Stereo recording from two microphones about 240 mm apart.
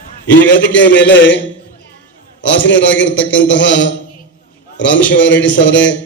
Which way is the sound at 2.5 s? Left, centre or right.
Left.